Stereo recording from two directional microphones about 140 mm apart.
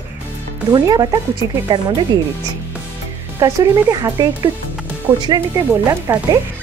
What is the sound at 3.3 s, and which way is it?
Speech, 20° right (ahead or behind).